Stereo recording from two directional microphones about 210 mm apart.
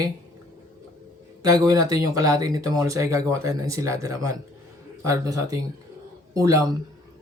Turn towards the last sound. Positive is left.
turn(degrees=-15)  # may be behind; listen again after turning